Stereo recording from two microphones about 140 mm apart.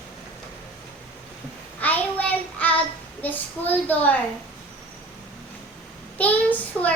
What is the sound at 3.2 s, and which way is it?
Speech, 10° left (ahead or behind).